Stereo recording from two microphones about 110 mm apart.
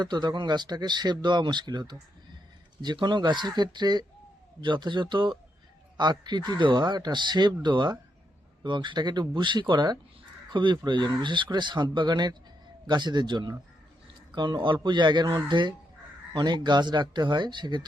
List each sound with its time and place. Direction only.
0.0 s a man's voice: 40° right (ahead or behind)